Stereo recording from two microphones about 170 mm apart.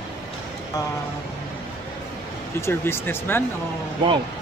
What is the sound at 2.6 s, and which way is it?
Speech, 15° left (ahead or behind).